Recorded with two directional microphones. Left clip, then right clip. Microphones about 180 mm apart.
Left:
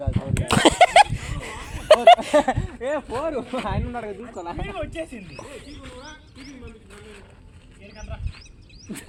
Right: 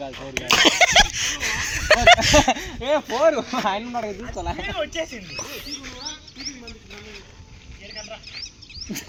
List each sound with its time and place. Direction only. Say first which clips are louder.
0.4 s a sound: even; 25° left (ahead or behind); by 2.3 s 10° left (ahead or behind)
2.3 s speech: right 2 dB; 40° right (ahead or behind); by 4.6 s 60° right (ahead or behind)
4.8 s speech: right 4 dB; 50° left (ahead or behind)